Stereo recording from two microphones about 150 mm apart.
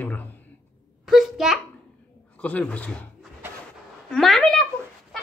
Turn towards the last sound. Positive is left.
turn(degrees=5)  # may be behind; listen again after turning